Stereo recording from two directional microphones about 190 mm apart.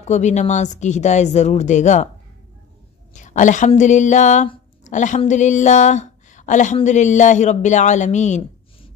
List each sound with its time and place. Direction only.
0.0 s speech: 35° left (ahead or behind)
3.1 s speech: 40° left (ahead or behind)